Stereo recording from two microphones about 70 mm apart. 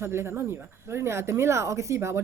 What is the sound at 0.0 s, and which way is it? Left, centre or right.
Speech, right.